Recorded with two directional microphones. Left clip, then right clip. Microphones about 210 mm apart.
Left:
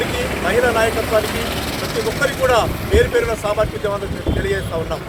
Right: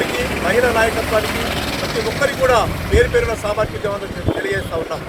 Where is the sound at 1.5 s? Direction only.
30° right (ahead or behind).